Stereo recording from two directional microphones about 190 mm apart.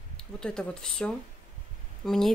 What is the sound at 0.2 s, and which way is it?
Speech, 5° left (ahead or behind).